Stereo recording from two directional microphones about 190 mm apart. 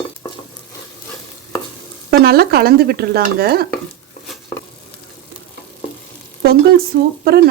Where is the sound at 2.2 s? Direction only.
55° right (ahead or behind).